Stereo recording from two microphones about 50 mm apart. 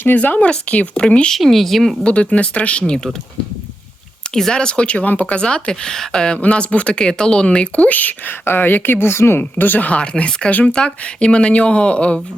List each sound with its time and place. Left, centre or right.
0.3 s speech: left
1.3 s speech: centre
2.0 s speech: left
4.4 s speech: centre